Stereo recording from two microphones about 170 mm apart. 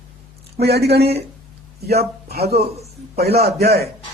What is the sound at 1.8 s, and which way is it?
A man's voice, 70° right (ahead or behind).